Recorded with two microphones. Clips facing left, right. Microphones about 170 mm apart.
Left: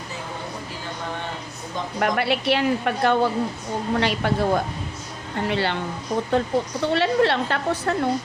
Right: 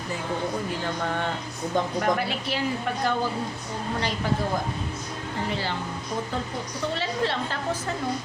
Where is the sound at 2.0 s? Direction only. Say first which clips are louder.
Left 3 dB; 70° left (ahead or behind).